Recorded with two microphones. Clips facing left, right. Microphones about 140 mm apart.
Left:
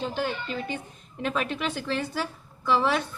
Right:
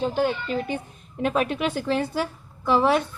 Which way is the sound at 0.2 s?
50° right (ahead or behind).